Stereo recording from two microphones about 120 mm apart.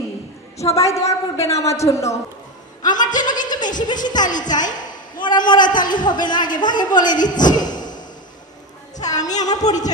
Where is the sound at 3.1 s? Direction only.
90° left.